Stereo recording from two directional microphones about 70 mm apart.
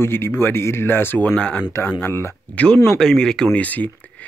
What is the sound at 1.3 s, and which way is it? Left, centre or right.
Speech, centre.